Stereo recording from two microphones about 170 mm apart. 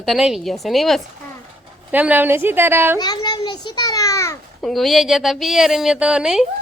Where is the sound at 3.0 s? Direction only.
25° left (ahead or behind).